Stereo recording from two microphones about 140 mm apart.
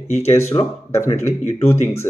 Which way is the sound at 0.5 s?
30° left (ahead or behind).